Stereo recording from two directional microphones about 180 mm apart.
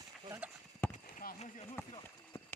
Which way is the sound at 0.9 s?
55° left (ahead or behind).